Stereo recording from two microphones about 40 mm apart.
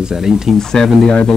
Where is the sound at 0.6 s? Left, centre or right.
Centre.